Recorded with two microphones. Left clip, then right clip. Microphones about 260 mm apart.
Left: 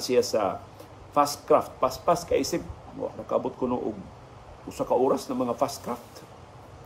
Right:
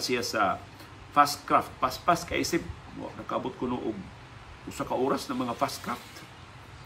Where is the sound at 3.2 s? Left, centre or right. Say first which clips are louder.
Left 4 dB; right.